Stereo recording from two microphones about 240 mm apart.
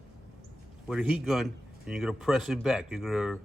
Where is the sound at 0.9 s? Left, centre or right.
Centre.